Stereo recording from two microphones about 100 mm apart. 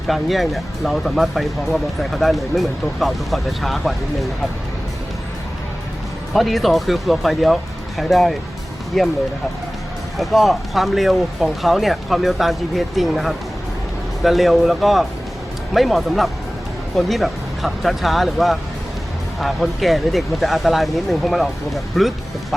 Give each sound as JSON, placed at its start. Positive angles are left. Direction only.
{"t": 0.1, "sound": "speech", "side_deg": 0}
{"t": 6.3, "sound": "speech", "side_deg": 0}
{"t": 10.2, "sound": "speech", "side_deg": 0}